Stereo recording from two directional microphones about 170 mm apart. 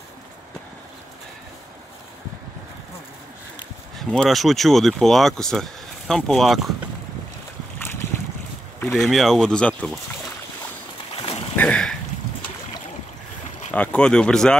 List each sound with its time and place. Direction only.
4.1 s speech: centre (ahead or behind)
8.9 s speech: centre (ahead or behind)
11.1 s boat: 35° left (ahead or behind)
11.5 s boat: 5° left (ahead or behind)
13.7 s speech: 5° left (ahead or behind)